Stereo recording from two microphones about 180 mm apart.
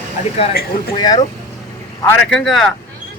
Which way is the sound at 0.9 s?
20° left (ahead or behind).